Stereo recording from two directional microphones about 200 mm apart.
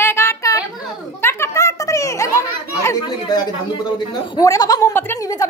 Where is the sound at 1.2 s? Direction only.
15° left (ahead or behind).